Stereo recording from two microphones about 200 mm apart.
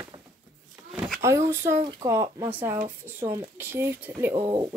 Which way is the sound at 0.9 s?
Centre (ahead or behind).